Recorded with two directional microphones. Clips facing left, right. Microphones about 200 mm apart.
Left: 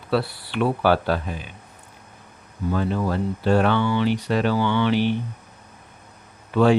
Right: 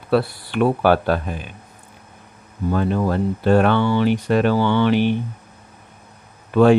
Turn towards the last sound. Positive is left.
turn(degrees=-50)  # may be behind; listen again after turning